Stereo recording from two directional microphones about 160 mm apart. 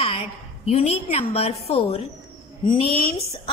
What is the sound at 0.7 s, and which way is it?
Speech, 40° left (ahead or behind).